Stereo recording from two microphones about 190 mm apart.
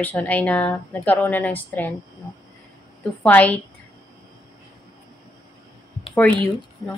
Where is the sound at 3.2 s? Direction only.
10° left (ahead or behind).